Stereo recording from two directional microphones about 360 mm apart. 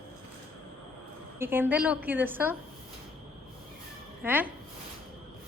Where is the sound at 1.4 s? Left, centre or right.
Centre.